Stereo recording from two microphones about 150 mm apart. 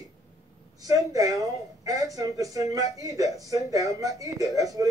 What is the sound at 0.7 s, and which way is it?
A woman's voice, 25° right (ahead or behind).